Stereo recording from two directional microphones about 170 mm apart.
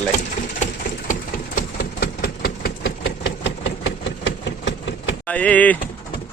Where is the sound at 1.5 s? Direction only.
65° left (ahead or behind); by 5.1 s 90° left.